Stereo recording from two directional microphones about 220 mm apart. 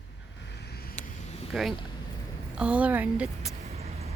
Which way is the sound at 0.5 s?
45° left (ahead or behind).